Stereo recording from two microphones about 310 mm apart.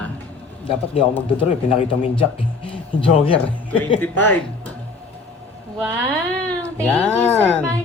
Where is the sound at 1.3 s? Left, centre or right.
Centre.